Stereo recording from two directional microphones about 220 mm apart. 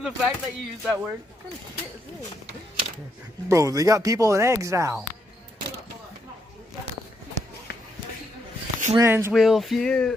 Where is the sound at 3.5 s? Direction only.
15° right (ahead or behind).